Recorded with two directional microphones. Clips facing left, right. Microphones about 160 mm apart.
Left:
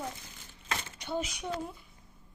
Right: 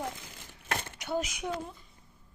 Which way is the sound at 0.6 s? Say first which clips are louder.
Right 3 dB; 55° right (ahead or behind).